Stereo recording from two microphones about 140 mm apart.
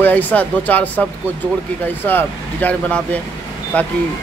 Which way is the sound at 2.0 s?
15° left (ahead or behind).